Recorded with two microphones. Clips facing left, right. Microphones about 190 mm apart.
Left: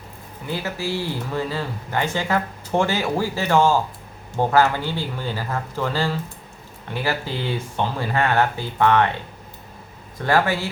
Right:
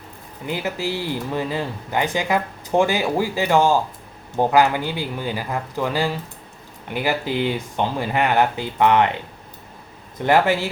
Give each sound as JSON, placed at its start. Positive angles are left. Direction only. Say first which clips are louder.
{"t": 0.4, "sound": "speech", "louder": "right 2 dB", "side_deg": -15}
{"t": 10.2, "sound": "speech", "louder": "right 3 dB", "side_deg": -20}